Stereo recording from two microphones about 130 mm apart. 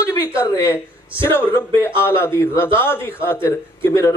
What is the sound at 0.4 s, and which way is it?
A man's voice, 20° left (ahead or behind).